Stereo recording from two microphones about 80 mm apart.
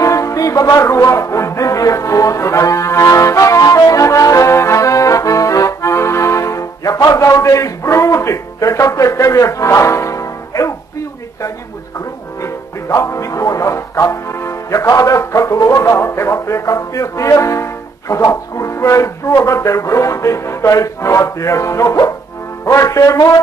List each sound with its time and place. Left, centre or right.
0.0 s music: left
12.4 s speech: left